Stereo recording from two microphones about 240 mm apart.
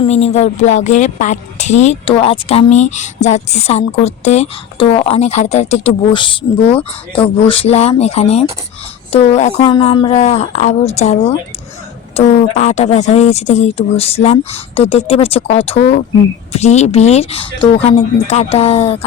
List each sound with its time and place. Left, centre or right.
0.0 s speech: left
6.7 s speech: centre
7.2 s speech: left